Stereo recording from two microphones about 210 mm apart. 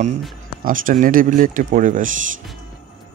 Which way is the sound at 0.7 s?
40° right (ahead or behind).